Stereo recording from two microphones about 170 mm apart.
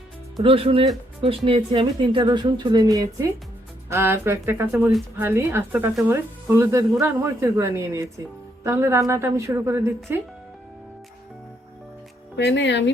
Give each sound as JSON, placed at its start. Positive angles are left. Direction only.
{"t": 0.4, "sound": "speech", "side_deg": -35}
{"t": 12.4, "sound": "speech", "side_deg": 90}